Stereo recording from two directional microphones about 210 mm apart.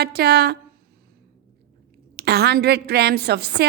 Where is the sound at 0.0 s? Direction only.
50° right (ahead or behind).